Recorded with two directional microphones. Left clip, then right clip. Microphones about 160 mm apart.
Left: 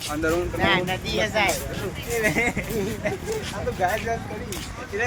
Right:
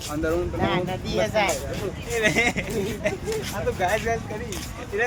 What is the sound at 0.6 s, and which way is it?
Speech, 75° right (ahead or behind).